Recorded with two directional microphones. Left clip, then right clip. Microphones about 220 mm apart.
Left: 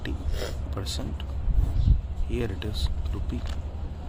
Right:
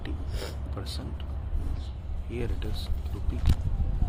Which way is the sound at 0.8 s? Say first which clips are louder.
Left 5 dB; 30° left (ahead or behind).